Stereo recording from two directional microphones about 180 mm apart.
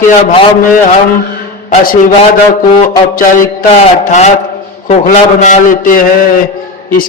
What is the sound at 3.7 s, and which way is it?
A man's voice, 40° left (ahead or behind).